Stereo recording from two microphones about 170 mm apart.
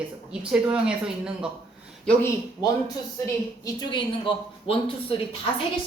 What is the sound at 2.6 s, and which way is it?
A woman's voice, 25° left (ahead or behind).